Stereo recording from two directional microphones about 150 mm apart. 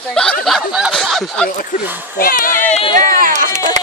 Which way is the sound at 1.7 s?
60° left (ahead or behind).